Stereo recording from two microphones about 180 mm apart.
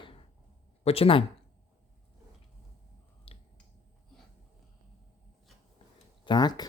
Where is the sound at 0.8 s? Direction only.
30° left (ahead or behind).